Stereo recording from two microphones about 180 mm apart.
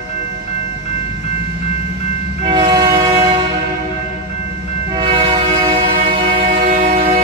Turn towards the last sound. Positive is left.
turn(degrees=-50)  # may be behind; listen again after turning